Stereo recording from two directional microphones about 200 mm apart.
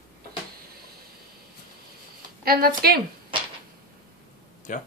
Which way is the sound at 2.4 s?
50° right (ahead or behind).